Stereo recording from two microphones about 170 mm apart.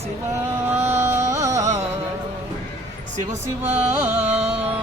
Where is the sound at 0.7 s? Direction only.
15° right (ahead or behind).